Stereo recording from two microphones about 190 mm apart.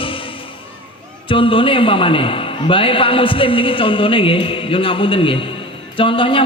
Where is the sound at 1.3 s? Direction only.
25° left (ahead or behind).